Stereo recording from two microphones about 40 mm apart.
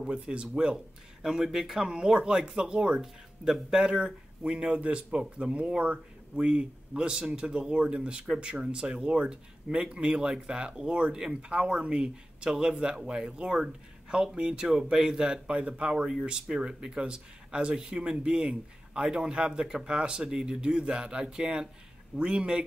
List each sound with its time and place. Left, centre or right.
0.0 s a man's voice: right
1.2 s a man's voice: centre; by 3.6 s right
3.8 s a man's voice: right